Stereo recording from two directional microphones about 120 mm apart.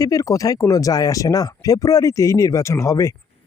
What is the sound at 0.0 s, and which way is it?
Speech, 30° left (ahead or behind).